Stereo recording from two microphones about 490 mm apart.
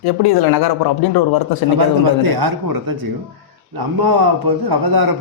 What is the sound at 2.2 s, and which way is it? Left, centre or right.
A man's voice, right.